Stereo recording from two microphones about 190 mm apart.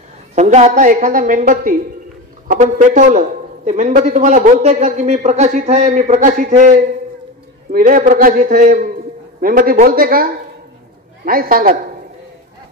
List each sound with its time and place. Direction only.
0.4 s a woman's voice: 40° right (ahead or behind)